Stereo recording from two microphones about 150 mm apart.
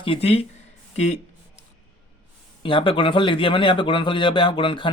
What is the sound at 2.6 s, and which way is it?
A man's voice, 35° left (ahead or behind).